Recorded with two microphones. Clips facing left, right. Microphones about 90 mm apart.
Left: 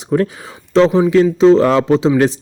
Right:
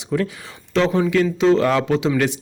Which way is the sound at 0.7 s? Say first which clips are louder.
Left 7 dB; 30° left (ahead or behind).